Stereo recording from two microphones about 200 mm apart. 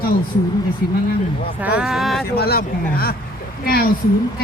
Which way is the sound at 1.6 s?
5° right (ahead or behind).